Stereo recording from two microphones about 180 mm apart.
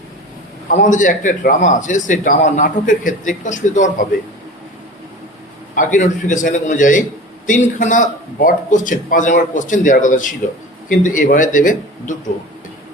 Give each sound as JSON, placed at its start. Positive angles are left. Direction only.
{"t": 0.7, "sound": "a man's voice", "side_deg": 45}
{"t": 5.7, "sound": "a man's voice", "side_deg": 45}